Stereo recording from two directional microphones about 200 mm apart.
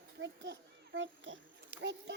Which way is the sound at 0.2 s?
60° right (ahead or behind).